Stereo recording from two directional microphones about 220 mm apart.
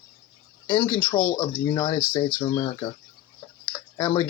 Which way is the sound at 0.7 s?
20° left (ahead or behind).